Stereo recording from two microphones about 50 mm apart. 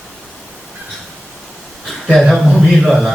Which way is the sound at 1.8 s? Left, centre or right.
Centre.